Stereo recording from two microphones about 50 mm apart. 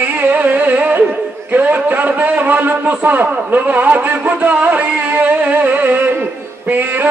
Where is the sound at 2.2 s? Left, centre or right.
Right.